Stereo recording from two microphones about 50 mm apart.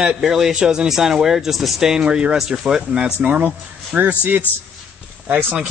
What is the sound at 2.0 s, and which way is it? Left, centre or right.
Speech, right.